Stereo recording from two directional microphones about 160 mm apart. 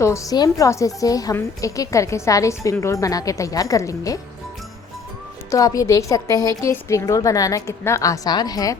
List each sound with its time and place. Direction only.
0.0 s a woman's voice: 20° left (ahead or behind)
5.5 s a woman's voice: 20° left (ahead or behind)